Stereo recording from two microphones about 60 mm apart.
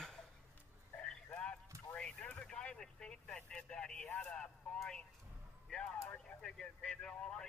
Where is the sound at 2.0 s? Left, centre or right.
Centre.